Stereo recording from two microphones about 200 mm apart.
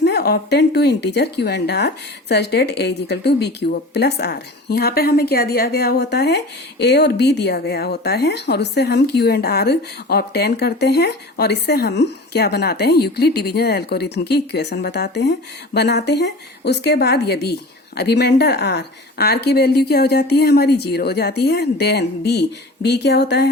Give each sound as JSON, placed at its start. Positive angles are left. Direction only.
{"t": 0.0, "sound": "speech", "side_deg": 55}